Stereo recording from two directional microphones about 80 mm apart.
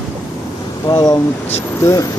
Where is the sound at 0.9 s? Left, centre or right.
Left.